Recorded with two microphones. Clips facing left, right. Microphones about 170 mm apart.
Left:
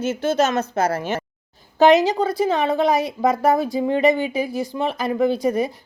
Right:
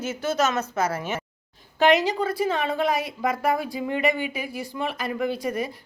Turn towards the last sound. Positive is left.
turn(degrees=25)  # may be behind; listen again after turning